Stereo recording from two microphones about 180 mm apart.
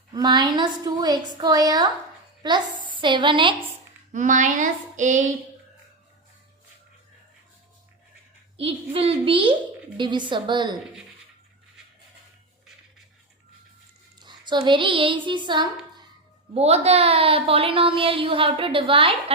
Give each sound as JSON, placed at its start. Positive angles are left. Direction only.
{"t": 0.1, "sound": "a woman's voice", "side_deg": -25}
{"t": 4.1, "sound": "a sound", "side_deg": -45}
{"t": 8.5, "sound": "a woman's voice", "side_deg": -30}
{"t": 14.2, "sound": "speech", "side_deg": -25}
{"t": 16.6, "sound": "a woman's voice", "side_deg": -35}